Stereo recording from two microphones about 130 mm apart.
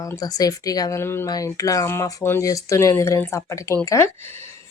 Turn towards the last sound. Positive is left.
turn(degrees=25)  # may be behind; listen again after turning